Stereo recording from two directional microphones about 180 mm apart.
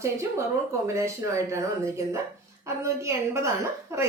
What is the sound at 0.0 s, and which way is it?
Speech, 15° right (ahead or behind).